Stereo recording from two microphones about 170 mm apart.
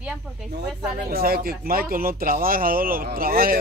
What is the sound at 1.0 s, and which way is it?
Speech, 60° right (ahead or behind).